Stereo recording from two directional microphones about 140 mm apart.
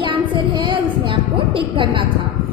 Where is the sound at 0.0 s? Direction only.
35° right (ahead or behind).